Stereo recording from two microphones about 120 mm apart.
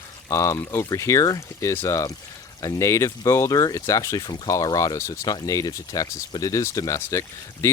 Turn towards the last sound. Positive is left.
turn(degrees=25)  # may be behind; listen again after turning